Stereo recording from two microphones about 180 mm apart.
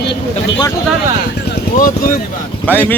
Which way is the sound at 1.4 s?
50° left (ahead or behind).